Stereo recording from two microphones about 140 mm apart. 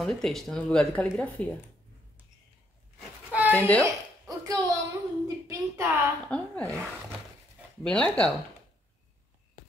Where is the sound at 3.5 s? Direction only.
10° left (ahead or behind).